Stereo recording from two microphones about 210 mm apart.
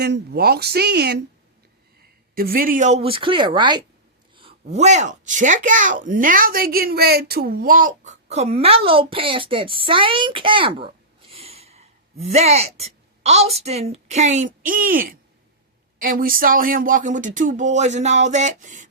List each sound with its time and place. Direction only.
0.0 s speech: 50° right (ahead or behind)